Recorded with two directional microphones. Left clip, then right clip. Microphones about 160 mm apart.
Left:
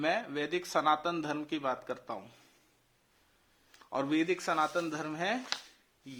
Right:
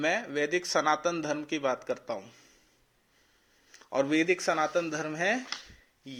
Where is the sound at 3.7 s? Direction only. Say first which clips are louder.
Right 5 dB; 20° right (ahead or behind).